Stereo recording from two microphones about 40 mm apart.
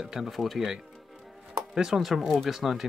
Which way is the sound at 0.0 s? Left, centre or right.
Centre.